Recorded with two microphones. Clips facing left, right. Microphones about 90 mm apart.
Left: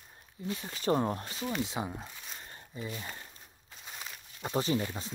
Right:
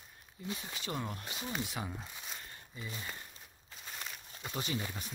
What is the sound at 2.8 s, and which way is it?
Speech, 30° left (ahead or behind).